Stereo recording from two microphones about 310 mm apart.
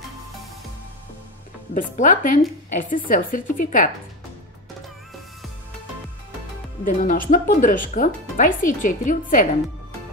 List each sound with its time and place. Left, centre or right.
1.7 s speech: left
6.8 s speech: left